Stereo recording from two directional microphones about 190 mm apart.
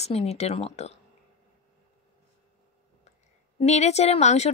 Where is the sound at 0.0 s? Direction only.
35° left (ahead or behind).